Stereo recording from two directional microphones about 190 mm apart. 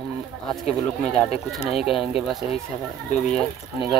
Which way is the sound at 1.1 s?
30° left (ahead or behind).